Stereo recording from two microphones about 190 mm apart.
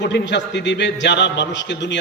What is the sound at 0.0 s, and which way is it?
A man's voice, 65° left (ahead or behind).